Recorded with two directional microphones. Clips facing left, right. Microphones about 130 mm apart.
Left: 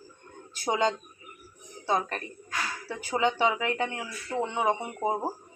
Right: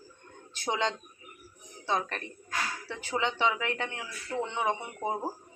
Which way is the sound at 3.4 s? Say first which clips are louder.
Left 3 dB; 10° left (ahead or behind).